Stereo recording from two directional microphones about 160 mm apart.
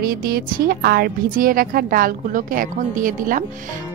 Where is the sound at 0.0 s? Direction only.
70° right (ahead or behind).